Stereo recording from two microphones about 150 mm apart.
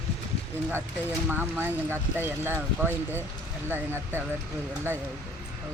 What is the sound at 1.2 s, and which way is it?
Speech, 15° right (ahead or behind).